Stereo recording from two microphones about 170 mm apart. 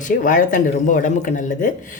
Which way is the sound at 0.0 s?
50° left (ahead or behind).